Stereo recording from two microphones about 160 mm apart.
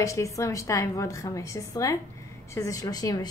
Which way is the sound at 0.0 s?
20° left (ahead or behind).